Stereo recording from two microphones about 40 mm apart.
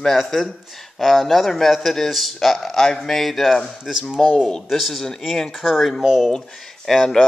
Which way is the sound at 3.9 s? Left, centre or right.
Centre.